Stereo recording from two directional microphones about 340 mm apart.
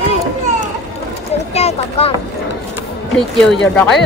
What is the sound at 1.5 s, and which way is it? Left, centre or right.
Speech, centre.